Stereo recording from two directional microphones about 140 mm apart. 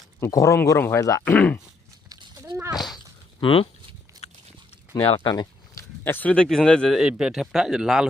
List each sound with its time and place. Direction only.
0.2 s speech: 20° left (ahead or behind)
1.3 s speech: 10° left (ahead or behind)
2.0 s a sound: 25° right (ahead or behind)
3.4 s speech: 40° left (ahead or behind)
4.1 s pig: 30° right (ahead or behind)
5.2 s a sound: 30° left (ahead or behind)
6.1 s speech: 10° left (ahead or behind)